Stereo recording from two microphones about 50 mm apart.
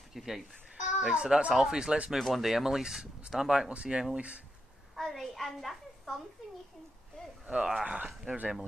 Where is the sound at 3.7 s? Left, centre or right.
Right.